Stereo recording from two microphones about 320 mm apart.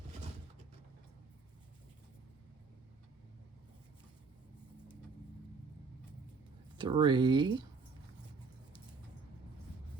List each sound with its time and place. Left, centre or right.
6.7 s speech: centre